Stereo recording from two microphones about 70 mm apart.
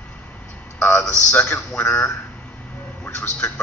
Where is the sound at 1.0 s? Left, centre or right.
Centre.